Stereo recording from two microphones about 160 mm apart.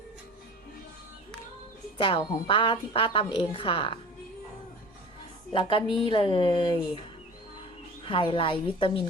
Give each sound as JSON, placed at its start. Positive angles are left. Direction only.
{"t": 2.0, "sound": "speech", "side_deg": 30}
{"t": 5.5, "sound": "speech", "side_deg": 30}
{"t": 8.0, "sound": "speech", "side_deg": 35}